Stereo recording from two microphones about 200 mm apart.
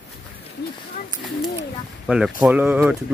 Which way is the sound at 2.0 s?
Centre (ahead or behind).